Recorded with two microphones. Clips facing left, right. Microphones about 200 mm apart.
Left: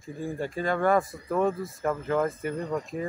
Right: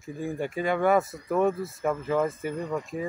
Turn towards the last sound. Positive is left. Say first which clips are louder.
# even
turn(degrees=0)  # may be behind; listen again after turning